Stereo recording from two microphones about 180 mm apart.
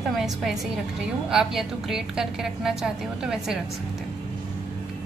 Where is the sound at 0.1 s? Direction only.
Centre (ahead or behind).